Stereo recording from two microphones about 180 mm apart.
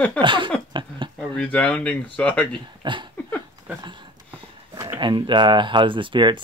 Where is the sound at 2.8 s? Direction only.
25° right (ahead or behind).